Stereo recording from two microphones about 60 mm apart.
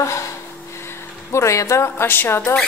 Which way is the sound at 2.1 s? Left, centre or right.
Left.